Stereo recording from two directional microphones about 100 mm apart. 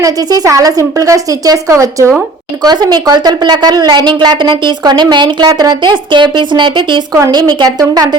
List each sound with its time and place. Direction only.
0.0 s speech: 35° right (ahead or behind)
2.6 s speech: 45° right (ahead or behind)
7.1 s speech: 40° right (ahead or behind)